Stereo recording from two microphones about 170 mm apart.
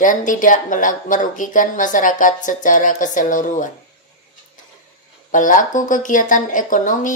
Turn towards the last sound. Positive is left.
turn(degrees=50)  # may be behind; listen again after turning